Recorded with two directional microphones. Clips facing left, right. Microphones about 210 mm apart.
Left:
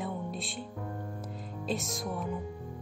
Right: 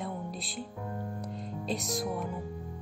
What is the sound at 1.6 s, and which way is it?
Speech, centre (ahead or behind).